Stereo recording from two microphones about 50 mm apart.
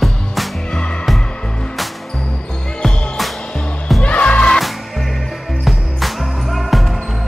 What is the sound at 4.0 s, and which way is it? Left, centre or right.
Music, left.